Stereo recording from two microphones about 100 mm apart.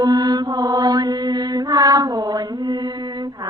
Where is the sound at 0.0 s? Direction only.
45° right (ahead or behind).